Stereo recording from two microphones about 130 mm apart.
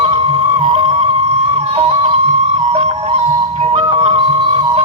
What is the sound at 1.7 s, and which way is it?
Music, 50° right (ahead or behind).